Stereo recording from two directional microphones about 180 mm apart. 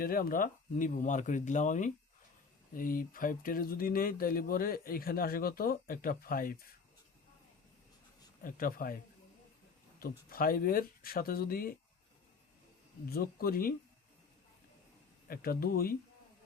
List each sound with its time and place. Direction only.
0.0 s speech: 55° left (ahead or behind)
8.4 s speech: 55° left (ahead or behind)
10.0 s speech: 55° left (ahead or behind)
13.1 s speech: 55° left (ahead or behind)
15.3 s speech: 55° left (ahead or behind)